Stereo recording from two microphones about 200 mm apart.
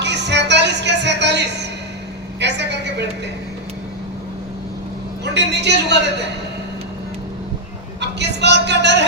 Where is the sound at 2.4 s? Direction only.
60° right (ahead or behind).